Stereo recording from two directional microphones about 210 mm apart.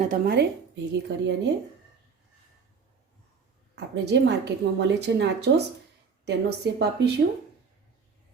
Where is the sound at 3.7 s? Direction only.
55° right (ahead or behind).